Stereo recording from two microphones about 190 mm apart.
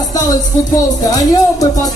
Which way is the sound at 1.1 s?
20° left (ahead or behind).